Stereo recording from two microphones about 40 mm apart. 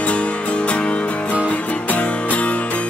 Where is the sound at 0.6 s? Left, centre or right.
Left.